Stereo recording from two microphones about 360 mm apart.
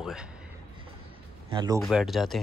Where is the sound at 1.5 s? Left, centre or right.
Centre.